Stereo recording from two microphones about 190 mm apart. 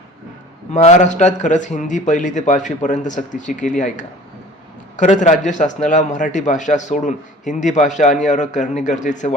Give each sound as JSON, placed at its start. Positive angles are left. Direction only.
{"t": 0.7, "sound": "a man's voice", "side_deg": 35}